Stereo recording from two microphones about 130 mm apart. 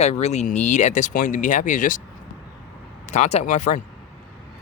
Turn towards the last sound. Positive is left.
turn(degrees=70)  # may be behind; listen again after turning